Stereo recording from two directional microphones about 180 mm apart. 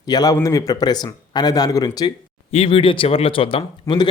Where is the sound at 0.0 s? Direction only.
20° left (ahead or behind).